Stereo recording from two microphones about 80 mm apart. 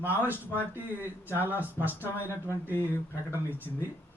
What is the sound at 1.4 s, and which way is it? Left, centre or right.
Speech, right.